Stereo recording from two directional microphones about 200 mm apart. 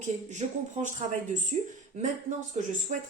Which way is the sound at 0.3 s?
40° right (ahead or behind).